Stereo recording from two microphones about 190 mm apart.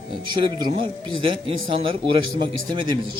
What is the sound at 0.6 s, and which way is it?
A man's voice, 25° right (ahead or behind).